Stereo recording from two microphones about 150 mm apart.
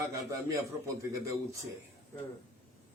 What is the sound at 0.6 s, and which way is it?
A man's voice, 20° right (ahead or behind).